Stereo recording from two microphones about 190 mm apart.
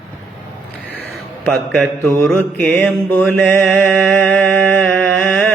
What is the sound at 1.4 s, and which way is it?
Mantra, 5° left (ahead or behind).